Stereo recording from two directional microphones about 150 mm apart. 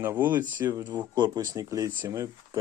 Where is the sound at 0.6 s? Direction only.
30° right (ahead or behind).